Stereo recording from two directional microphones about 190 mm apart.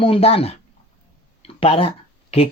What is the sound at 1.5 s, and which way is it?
Speech, 30° left (ahead or behind).